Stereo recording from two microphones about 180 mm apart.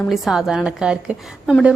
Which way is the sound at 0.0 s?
Centre (ahead or behind).